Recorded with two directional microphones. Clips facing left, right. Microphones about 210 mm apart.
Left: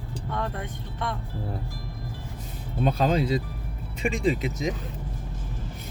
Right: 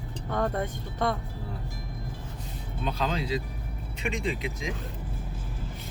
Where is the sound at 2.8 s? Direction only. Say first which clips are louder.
Left 7 dB; 50° left (ahead or behind).